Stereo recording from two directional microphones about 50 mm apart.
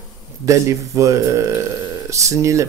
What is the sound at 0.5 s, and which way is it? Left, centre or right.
Speech, right.